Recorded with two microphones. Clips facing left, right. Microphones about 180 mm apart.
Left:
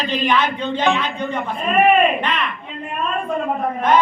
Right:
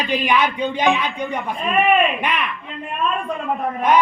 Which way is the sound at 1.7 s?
45° left (ahead or behind).